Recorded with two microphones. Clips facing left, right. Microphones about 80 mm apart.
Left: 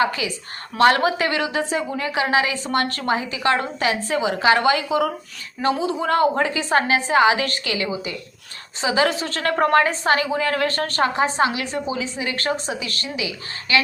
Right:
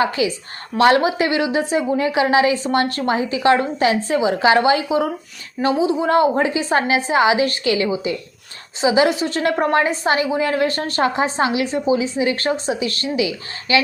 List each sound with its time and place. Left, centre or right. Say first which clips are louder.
1.0 s a woman's voice: right 3 dB; centre
5.7 s a woman's voice: right 5 dB; centre
6.1 s a woman's voice: right 1 dB; right
8.8 s a woman's voice: right 4 dB; centre